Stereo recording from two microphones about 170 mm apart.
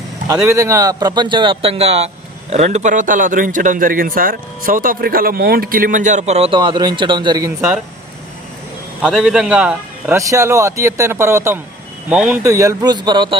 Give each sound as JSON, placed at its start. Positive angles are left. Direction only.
{"t": 0.4, "sound": "a man's voice", "side_deg": -20}
{"t": 9.0, "sound": "a man's voice", "side_deg": -5}
{"t": 10.2, "sound": "speech", "side_deg": -20}
{"t": 12.0, "sound": "a man's voice", "side_deg": -5}
{"t": 12.4, "sound": "speech", "side_deg": -20}